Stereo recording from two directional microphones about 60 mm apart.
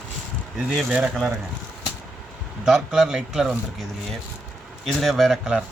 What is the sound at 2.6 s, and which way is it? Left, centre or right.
Speech, centre.